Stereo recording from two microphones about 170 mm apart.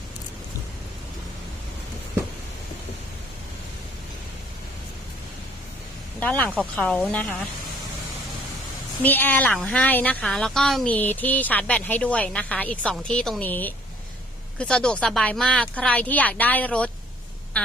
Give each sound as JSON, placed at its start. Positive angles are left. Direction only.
{"t": 6.1, "sound": "speech", "side_deg": 10}
{"t": 9.0, "sound": "speech", "side_deg": 10}